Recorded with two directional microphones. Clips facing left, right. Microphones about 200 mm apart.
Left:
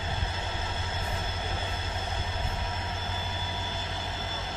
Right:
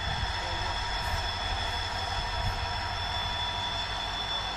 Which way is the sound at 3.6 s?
30° left (ahead or behind).